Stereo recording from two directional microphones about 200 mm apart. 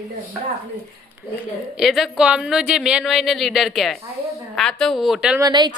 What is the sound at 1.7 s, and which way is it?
A woman's voice, centre (ahead or behind).